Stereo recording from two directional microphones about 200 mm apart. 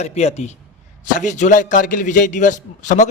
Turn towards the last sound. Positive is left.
turn(degrees=40)  # may be behind; listen again after turning